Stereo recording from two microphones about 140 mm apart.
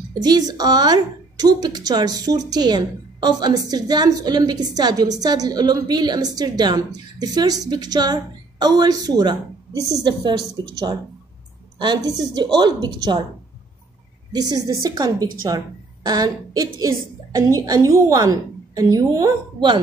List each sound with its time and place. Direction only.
0.1 s a woman's voice: 30° right (ahead or behind)
14.3 s a woman's voice: 30° right (ahead or behind)